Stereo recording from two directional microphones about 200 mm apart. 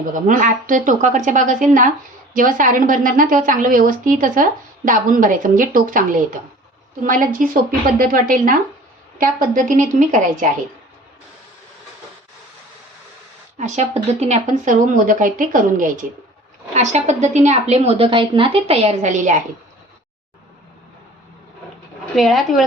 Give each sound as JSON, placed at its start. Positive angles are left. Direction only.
{"t": 0.1, "sound": "a woman's voice", "side_deg": -40}
{"t": 13.6, "sound": "a woman's voice", "side_deg": -35}
{"t": 22.1, "sound": "speech", "side_deg": 0}